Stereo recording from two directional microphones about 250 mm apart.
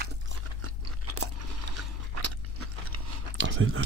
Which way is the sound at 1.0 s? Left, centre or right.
Right.